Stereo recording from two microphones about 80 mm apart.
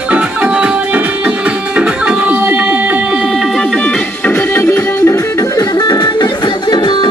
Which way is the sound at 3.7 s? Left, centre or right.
Left.